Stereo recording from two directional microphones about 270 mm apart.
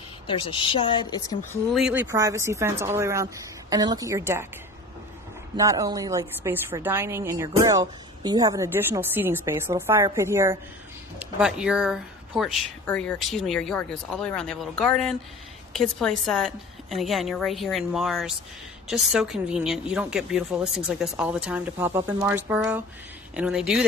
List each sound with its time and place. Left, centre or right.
0.3 s speech: centre
1.7 s a woman's voice: centre
5.6 s a woman's voice: centre
16.3 s speech: centre